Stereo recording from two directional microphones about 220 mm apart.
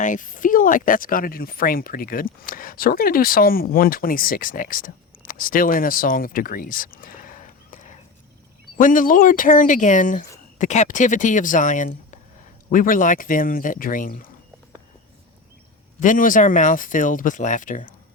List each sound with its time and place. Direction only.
0.0 s speech: 35° left (ahead or behind)
16.0 s speech: 35° left (ahead or behind)